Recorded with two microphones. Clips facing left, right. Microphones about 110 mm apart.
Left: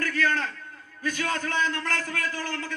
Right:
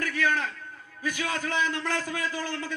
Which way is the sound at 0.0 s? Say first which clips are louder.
Left 1 dB; 15° right (ahead or behind).